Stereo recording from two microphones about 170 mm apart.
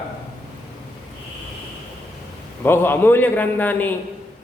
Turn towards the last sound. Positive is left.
turn(degrees=10)  # may be behind; listen again after turning